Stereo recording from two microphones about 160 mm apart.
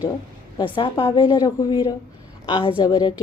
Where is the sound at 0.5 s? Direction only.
30° left (ahead or behind).